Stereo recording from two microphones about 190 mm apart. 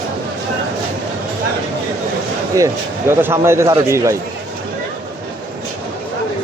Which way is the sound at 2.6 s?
15° right (ahead or behind).